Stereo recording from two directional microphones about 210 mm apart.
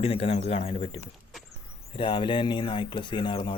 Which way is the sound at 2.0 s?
25° left (ahead or behind).